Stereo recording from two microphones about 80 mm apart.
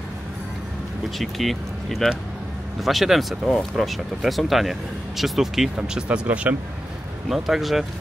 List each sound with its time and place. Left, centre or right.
1.1 s speech: centre
5.8 s speech: centre
7.2 s speech: centre